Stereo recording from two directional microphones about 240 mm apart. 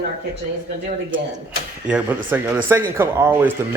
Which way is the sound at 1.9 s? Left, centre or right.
Centre.